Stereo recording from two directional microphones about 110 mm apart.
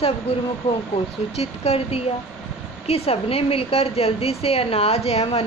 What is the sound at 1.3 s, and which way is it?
A woman's voice, 70° left (ahead or behind).